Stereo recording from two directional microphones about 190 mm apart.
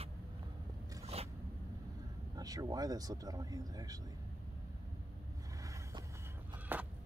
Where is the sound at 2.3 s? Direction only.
20° right (ahead or behind).